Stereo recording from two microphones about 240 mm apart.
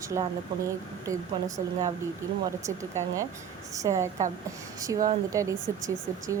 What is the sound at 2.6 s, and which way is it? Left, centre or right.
Speech, centre.